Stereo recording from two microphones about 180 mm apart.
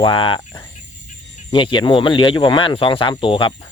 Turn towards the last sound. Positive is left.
turn(degrees=30)  # may be behind; listen again after turning